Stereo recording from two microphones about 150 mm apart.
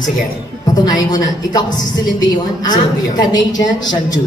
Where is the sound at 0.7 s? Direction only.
25° left (ahead or behind).